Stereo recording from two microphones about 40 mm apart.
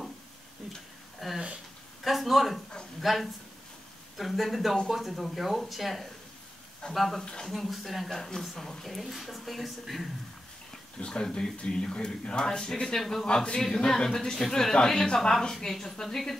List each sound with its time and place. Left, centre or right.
1.2 s speech: centre
8.2 s speech: centre
11.0 s speech: left
12.9 s a woman's voice: centre
13.3 s a woman's voice: left